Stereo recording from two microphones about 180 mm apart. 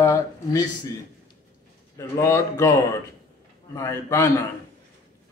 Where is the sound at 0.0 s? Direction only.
20° left (ahead or behind).